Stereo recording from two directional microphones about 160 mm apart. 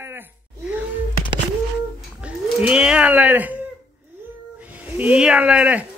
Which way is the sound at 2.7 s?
5° right (ahead or behind).